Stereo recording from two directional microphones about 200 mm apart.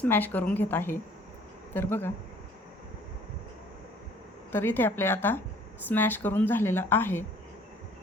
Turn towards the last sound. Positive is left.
turn(degrees=10)  # may be behind; listen again after turning